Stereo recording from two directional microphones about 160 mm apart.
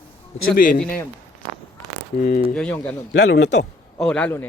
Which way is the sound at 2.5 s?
10° left (ahead or behind).